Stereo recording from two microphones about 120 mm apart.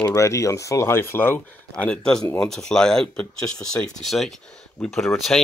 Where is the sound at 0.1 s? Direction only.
25° left (ahead or behind).